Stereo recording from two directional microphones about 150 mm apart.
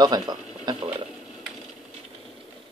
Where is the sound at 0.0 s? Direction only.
25° right (ahead or behind).